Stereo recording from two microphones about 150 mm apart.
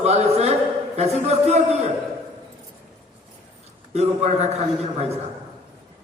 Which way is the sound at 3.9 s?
50° right (ahead or behind).